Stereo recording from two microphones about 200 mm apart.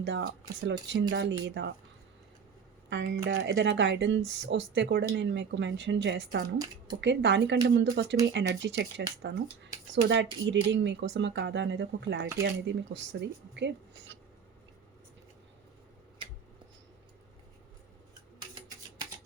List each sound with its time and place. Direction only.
0.0 s speech: 65° right (ahead or behind)
2.9 s speech: 65° right (ahead or behind)